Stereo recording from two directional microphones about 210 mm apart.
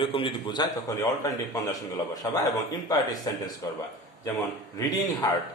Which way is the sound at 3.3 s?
20° left (ahead or behind).